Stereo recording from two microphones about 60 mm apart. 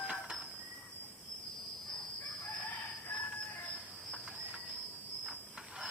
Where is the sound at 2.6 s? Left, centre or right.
Left.